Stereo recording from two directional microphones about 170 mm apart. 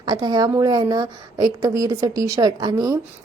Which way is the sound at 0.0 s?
25° right (ahead or behind).